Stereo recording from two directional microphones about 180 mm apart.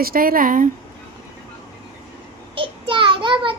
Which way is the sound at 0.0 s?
55° right (ahead or behind).